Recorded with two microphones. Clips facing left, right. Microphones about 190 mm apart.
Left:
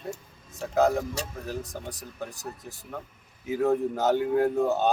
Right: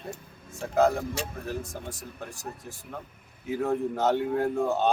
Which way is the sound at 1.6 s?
20° left (ahead or behind).